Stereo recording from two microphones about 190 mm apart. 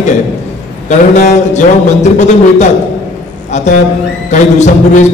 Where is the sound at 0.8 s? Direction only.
40° left (ahead or behind).